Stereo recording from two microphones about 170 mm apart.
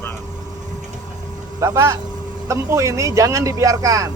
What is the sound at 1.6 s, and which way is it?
A man's voice, 15° right (ahead or behind).